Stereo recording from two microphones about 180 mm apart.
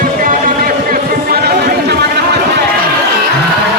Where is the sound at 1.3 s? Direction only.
65° right (ahead or behind).